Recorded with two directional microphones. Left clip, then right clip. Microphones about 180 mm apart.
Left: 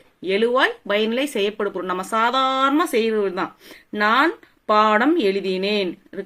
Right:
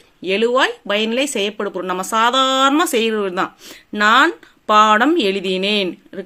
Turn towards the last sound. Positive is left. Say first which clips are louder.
# right 3 dB
turn(degrees=-30)  # may be behind; listen again after turning